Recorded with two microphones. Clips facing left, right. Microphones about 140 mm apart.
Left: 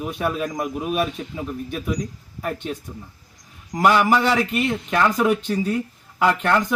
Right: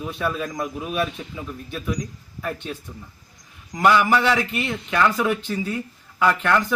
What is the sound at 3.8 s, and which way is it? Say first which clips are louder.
A man's voice: even; 15° left (ahead or behind).